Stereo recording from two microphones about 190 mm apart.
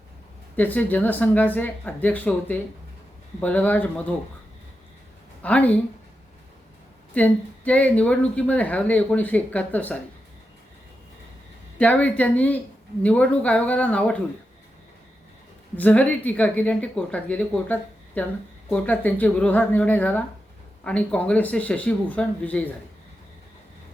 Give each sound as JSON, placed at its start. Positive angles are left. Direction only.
{"t": 0.5, "sound": "speech", "side_deg": 10}
{"t": 5.4, "sound": "a woman's voice", "side_deg": 5}
{"t": 7.1, "sound": "speech", "side_deg": 10}
{"t": 11.8, "sound": "speech", "side_deg": 10}
{"t": 15.7, "sound": "speech", "side_deg": 10}